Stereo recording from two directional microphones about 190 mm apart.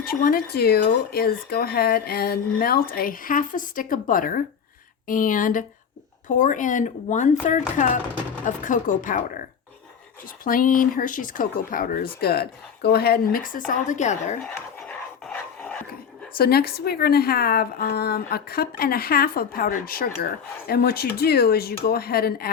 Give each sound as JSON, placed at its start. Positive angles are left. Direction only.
{"t": 0.0, "sound": "speech", "side_deg": 50}
{"t": 14.5, "sound": "dog", "side_deg": 5}
{"t": 16.4, "sound": "speech", "side_deg": 55}